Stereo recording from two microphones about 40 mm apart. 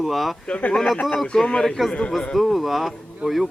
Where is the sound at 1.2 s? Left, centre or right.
Left.